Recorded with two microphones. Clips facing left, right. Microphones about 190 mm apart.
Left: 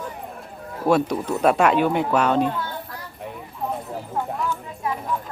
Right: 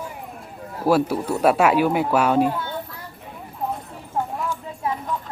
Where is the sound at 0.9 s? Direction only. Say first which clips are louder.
Right 1 dB; 5° right (ahead or behind).